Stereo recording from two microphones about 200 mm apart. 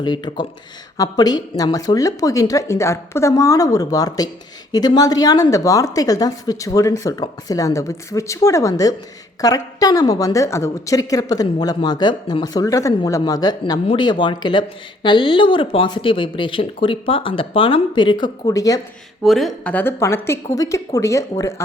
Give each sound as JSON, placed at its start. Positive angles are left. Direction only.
{"t": 0.0, "sound": "a woman's voice", "side_deg": 20}
{"t": 19.2, "sound": "a woman's voice", "side_deg": 0}